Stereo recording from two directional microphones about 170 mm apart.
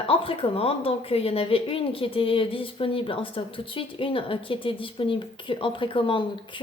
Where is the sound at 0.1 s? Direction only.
35° left (ahead or behind).